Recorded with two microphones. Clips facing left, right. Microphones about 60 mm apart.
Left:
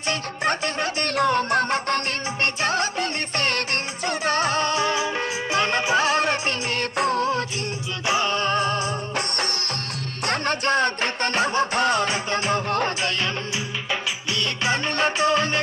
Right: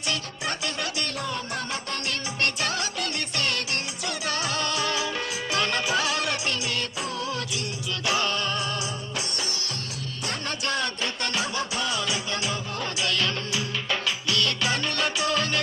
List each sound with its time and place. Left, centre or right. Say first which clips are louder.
0.1 s music: left 7 dB; left
1.1 s music: left 11 dB; left
2.4 s music: left 5 dB; left
8.1 s music: left 5 dB; left
14.3 s music: left 2 dB; left